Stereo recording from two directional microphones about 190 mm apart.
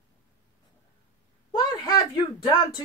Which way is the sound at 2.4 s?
25° left (ahead or behind).